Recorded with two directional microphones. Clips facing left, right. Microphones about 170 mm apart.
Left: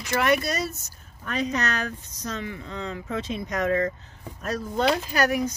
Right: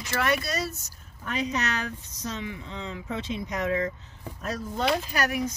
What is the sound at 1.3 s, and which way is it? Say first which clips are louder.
Speech: left 2 dB; 50° left (ahead or behind).